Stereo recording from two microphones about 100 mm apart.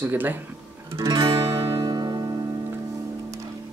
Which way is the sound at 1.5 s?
50° right (ahead or behind).